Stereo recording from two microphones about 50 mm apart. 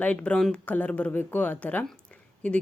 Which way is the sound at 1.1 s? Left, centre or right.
Left.